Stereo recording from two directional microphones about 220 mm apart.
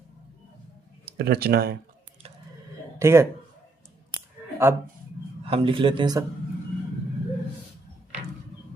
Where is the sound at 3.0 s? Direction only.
10° right (ahead or behind).